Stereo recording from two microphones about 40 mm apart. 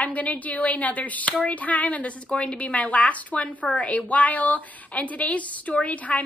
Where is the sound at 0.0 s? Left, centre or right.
Left.